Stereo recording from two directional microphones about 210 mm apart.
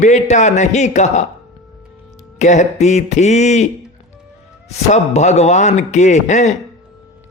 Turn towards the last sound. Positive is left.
turn(degrees=35)  # may be behind; listen again after turning